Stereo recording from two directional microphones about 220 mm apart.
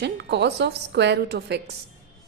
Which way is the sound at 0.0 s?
50° right (ahead or behind).